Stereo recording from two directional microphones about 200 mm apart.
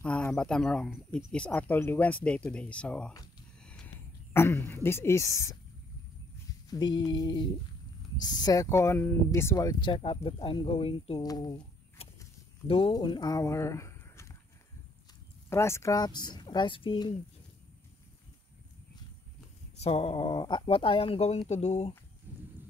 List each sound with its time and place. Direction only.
0.0 s speech: 5° left (ahead or behind)
6.7 s speech: 20° left (ahead or behind)
15.5 s speech: 15° left (ahead or behind)
19.8 s speech: 30° left (ahead or behind)